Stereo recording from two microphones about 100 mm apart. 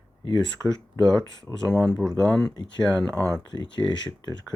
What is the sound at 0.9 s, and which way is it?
Speech, 30° left (ahead or behind).